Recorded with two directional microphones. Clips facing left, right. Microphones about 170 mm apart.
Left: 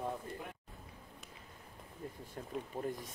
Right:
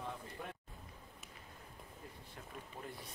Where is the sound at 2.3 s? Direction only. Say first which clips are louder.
Left 10 dB; 40° left (ahead or behind).